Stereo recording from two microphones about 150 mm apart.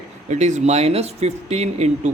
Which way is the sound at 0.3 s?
50° right (ahead or behind).